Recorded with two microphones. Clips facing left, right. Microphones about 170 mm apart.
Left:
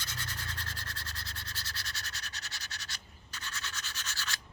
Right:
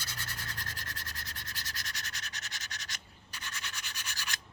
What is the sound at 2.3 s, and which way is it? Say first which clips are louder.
Scratch: right 1 dB; 20° right (ahead or behind).